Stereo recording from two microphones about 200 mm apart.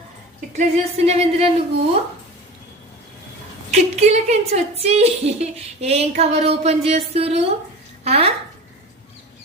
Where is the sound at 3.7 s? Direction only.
35° right (ahead or behind).